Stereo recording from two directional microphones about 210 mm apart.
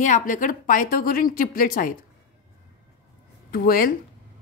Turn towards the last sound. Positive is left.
turn(degrees=45)  # may be behind; listen again after turning